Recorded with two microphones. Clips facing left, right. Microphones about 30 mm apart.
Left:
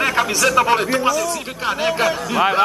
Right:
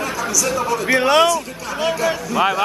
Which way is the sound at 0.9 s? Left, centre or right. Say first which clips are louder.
Right 4 dB; right.